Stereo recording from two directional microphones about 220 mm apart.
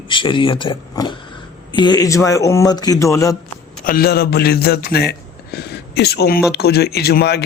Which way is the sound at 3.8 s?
40° left (ahead or behind).